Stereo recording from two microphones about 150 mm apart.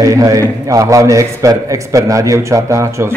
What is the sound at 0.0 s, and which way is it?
A man's voice, 20° right (ahead or behind).